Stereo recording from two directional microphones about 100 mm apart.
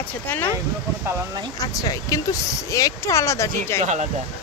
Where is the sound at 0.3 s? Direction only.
20° left (ahead or behind).